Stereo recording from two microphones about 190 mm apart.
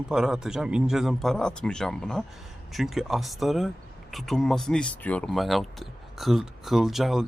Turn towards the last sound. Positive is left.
turn(degrees=0)  # may be behind; listen again after turning